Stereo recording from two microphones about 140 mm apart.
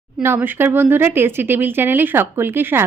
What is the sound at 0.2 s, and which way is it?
A woman's voice, 15° right (ahead or behind).